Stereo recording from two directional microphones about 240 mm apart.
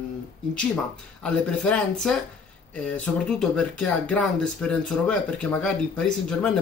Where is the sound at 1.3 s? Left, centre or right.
Centre.